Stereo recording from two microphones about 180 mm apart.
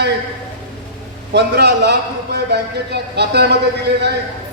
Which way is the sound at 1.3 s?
65° right (ahead or behind).